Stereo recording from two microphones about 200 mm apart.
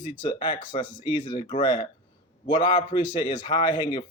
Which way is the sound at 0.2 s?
25° left (ahead or behind).